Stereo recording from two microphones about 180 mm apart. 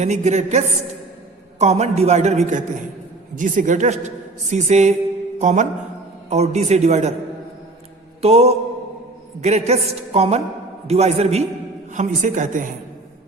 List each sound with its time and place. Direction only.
0.0 s a man's voice: 40° right (ahead or behind)
5.4 s mantra: 40° right (ahead or behind)
6.3 s a man's voice: 35° right (ahead or behind)
8.2 s a man's voice: 35° right (ahead or behind)